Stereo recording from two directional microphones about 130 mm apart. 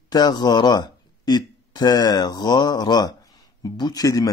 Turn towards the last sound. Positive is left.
turn(degrees=30)  # may be behind; listen again after turning